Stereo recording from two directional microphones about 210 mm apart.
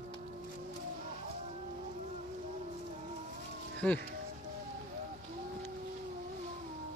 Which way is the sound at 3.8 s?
5° left (ahead or behind).